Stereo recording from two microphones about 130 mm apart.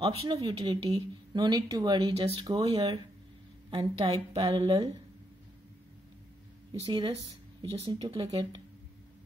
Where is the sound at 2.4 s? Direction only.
30° right (ahead or behind).